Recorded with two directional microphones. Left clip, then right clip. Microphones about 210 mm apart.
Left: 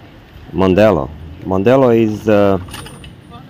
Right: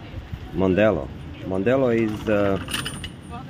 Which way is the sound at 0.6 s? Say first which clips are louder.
Left 8 dB; 30° left (ahead or behind).